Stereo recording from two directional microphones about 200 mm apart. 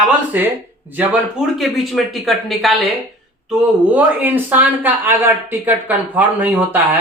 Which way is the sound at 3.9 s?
10° right (ahead or behind).